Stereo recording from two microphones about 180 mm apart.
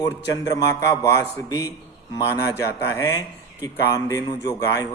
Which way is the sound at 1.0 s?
15° left (ahead or behind).